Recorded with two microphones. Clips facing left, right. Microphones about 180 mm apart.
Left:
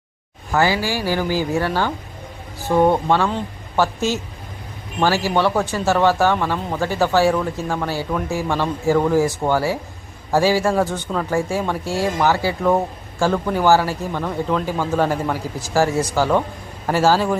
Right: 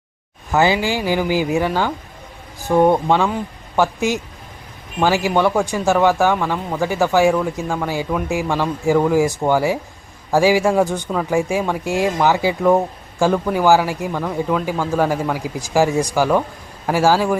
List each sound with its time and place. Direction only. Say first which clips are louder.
0.5 s speech: right 2 dB; 20° right (ahead or behind)